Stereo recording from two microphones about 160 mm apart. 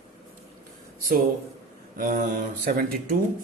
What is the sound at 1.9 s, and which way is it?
Speech, 60° right (ahead or behind).